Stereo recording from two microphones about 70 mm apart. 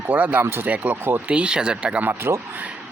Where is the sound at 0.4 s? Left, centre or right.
Right.